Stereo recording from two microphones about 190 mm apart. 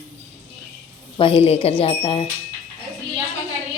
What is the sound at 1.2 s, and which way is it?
Speech, 30° left (ahead or behind).